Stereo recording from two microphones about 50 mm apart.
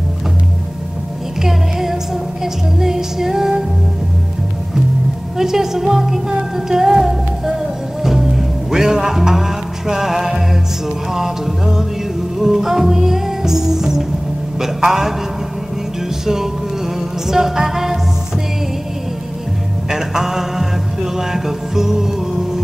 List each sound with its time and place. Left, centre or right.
1.4 s music: centre
5.4 s music: centre
17.3 s music: centre
19.9 s music: centre